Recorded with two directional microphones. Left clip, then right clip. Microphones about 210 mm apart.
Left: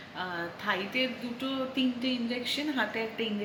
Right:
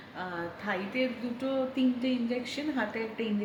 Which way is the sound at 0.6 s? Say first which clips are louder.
Left 2 dB; 15° right (ahead or behind).